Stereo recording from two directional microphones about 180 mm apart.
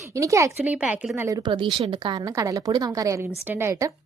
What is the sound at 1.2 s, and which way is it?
A woman's voice, 20° right (ahead or behind).